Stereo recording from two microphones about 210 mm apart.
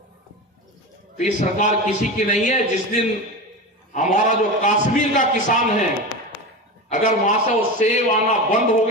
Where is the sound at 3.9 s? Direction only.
35° left (ahead or behind).